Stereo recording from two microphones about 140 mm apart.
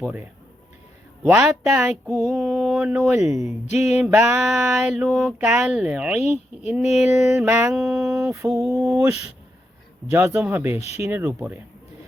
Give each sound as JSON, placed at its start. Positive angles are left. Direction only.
{"t": 0.0, "sound": "speech", "side_deg": -10}
{"t": 1.3, "sound": "speech", "side_deg": -10}
{"t": 2.2, "sound": "speech", "side_deg": 0}
{"t": 4.9, "sound": "speech", "side_deg": -5}
{"t": 7.3, "sound": "speech", "side_deg": -15}
{"t": 7.8, "sound": "speech", "side_deg": -5}
{"t": 8.3, "sound": "speech", "side_deg": -20}